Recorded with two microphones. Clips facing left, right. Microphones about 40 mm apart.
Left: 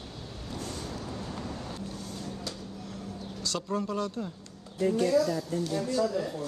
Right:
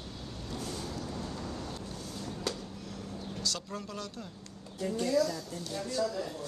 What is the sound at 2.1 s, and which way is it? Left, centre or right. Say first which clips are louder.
Vehicle: right 1 dB; centre.